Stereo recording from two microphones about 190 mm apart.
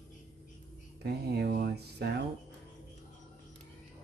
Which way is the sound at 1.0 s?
55° right (ahead or behind).